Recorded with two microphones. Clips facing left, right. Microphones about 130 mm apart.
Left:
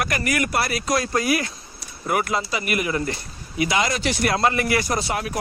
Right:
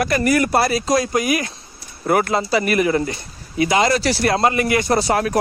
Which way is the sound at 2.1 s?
35° right (ahead or behind).